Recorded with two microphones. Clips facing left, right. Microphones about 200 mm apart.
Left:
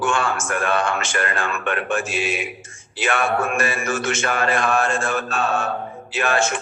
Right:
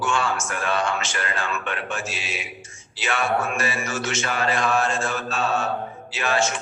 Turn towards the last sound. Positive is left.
turn(degrees=55)  # may be behind; listen again after turning